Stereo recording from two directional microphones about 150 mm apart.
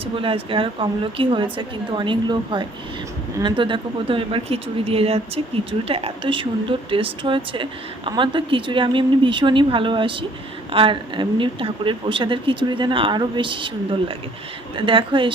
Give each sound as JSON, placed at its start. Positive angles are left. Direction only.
{"t": 0.0, "sound": "speech", "side_deg": -40}
{"t": 14.8, "sound": "speech", "side_deg": -35}